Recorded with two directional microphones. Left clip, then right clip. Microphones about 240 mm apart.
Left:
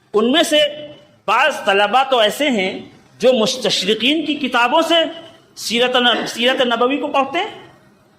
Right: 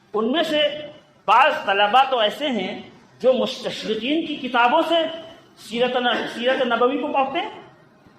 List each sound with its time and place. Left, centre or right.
0.1 s a woman's voice: left